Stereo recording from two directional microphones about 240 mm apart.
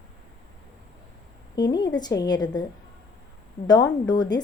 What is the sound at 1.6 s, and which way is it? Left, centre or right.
A woman's voice, centre.